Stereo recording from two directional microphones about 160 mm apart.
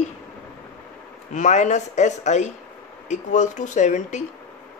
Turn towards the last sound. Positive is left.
turn(degrees=50)  # may be behind; listen again after turning